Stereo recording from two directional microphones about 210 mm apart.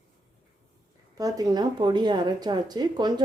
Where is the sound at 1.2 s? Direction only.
20° right (ahead or behind).